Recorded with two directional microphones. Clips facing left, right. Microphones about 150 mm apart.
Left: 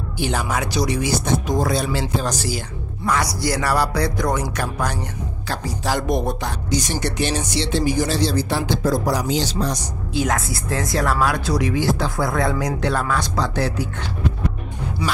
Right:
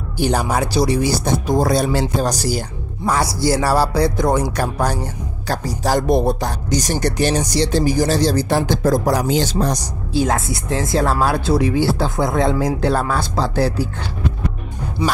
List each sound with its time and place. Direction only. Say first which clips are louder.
0.2 s speech: right 5 dB; 40° right (ahead or behind)
3.1 s speech: right 4 dB; 30° right (ahead or behind); by 9.8 s 45° right (ahead or behind)
10.1 s speech: right 4 dB; 25° right (ahead or behind)